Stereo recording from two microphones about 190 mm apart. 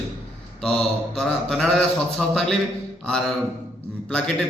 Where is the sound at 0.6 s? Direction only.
5° left (ahead or behind).